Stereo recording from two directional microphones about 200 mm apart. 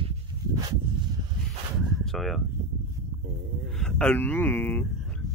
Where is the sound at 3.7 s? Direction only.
5° left (ahead or behind).